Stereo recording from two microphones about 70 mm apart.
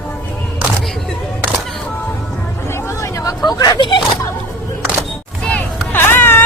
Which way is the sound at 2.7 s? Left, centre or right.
Left.